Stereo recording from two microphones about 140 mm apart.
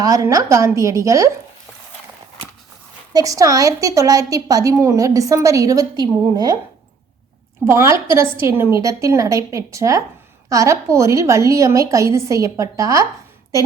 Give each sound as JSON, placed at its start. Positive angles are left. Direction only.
{"t": 0.0, "sound": "a woman's voice", "side_deg": -25}
{"t": 3.1, "sound": "a woman's voice", "side_deg": -25}
{"t": 7.6, "sound": "a woman's voice", "side_deg": -20}